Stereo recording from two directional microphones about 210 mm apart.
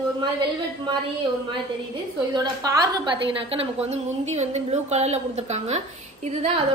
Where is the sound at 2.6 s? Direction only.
20° right (ahead or behind).